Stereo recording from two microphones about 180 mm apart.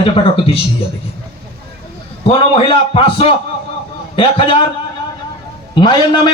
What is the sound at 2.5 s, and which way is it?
A child's voice, 30° left (ahead or behind).